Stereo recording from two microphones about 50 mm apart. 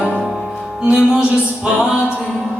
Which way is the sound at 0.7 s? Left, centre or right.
Centre.